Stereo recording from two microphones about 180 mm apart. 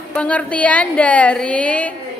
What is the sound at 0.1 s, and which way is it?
A woman's voice, 5° left (ahead or behind).